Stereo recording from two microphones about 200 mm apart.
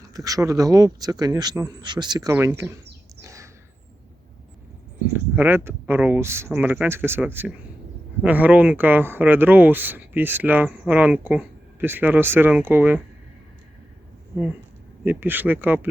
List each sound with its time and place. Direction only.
0.1 s speech: 15° right (ahead or behind)
3.2 s bird: 15° right (ahead or behind)
5.1 s speech: 10° right (ahead or behind)
15.0 s speech: 10° right (ahead or behind)